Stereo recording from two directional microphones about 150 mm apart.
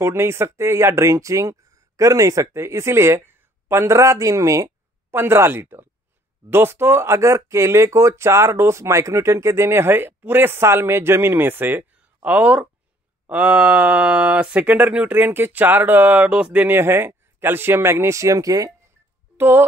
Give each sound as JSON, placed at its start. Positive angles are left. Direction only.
{"t": 0.0, "sound": "speech", "side_deg": -15}
{"t": 19.3, "sound": "music", "side_deg": -15}